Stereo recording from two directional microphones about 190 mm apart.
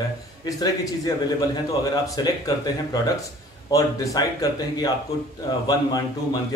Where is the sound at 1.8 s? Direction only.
20° left (ahead or behind).